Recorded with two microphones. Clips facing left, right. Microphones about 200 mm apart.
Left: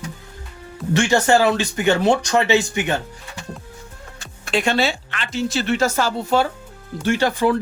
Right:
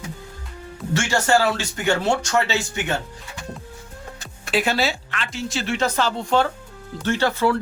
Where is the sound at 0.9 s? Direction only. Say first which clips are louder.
Left 4 dB; 20° left (ahead or behind).